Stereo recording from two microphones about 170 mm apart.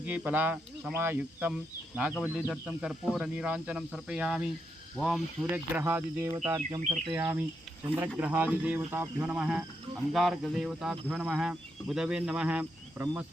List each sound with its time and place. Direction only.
0.0 s speech: 10° right (ahead or behind)
5.8 s speech: 15° right (ahead or behind)
6.7 s speech: 45° right (ahead or behind)
7.1 s speech: 15° right (ahead or behind)